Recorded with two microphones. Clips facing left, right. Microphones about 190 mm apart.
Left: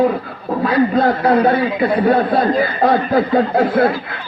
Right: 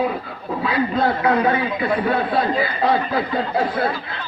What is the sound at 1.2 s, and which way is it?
Speech, 35° left (ahead or behind).